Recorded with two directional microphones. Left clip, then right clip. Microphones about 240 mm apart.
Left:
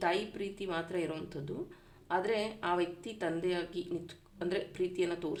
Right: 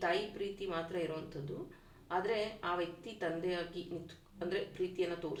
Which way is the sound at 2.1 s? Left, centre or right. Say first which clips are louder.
Left 3 dB; left.